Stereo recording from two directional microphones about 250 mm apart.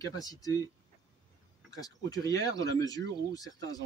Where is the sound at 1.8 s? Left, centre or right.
Centre.